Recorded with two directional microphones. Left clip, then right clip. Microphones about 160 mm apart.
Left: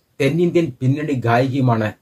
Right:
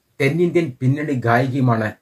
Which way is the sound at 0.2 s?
20° left (ahead or behind).